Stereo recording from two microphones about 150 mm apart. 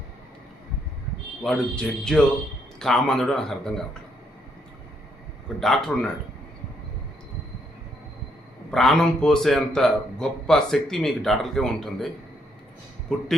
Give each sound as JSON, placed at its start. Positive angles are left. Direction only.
{"t": 1.5, "sound": "a man's voice", "side_deg": 5}
{"t": 5.5, "sound": "a man's voice", "side_deg": 0}
{"t": 8.7, "sound": "a man's voice", "side_deg": 0}